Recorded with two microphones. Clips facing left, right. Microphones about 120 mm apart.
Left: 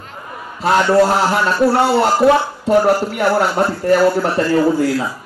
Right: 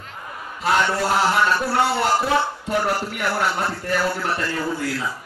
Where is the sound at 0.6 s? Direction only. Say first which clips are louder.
Left 8 dB; 35° left (ahead or behind).